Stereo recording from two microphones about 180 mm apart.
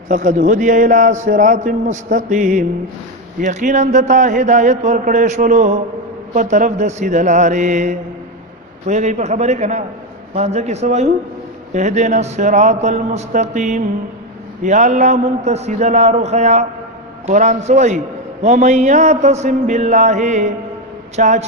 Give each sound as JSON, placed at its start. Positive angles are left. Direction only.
{"t": 0.1, "sound": "a man's voice", "side_deg": -45}